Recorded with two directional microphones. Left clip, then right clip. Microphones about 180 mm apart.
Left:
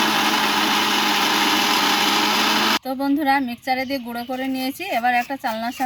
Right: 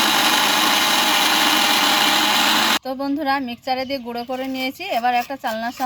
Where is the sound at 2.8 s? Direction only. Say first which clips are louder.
Left 2 dB; 30° right (ahead or behind).